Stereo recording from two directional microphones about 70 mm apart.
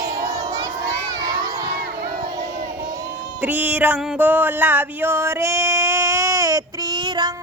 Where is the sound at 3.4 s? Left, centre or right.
Right.